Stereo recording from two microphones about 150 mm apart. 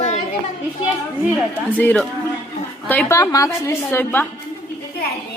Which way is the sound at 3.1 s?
20° left (ahead or behind).